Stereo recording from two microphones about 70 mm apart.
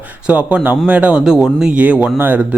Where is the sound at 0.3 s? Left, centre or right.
Centre.